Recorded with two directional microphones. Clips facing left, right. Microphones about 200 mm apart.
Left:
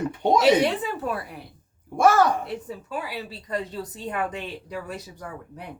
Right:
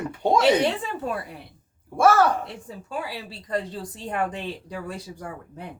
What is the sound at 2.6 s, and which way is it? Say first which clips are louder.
A woman's voice: even; 30° right (ahead or behind).